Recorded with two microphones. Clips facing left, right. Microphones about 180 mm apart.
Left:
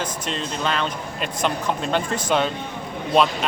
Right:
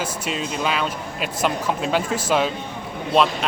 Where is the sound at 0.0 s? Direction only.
5° right (ahead or behind).